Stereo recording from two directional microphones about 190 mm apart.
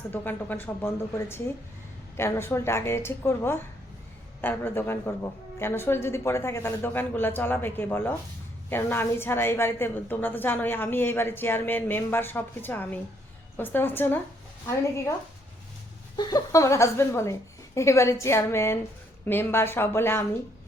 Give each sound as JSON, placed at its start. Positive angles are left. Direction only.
{"t": 0.1, "sound": "a woman's voice", "side_deg": 10}
{"t": 16.1, "sound": "a woman's voice", "side_deg": 20}